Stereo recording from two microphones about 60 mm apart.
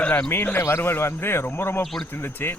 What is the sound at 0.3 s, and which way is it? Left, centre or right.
Speech, left.